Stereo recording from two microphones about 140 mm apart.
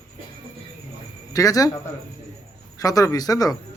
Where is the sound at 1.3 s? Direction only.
25° left (ahead or behind).